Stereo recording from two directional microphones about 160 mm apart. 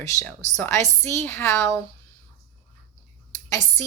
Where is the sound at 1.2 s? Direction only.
15° left (ahead or behind).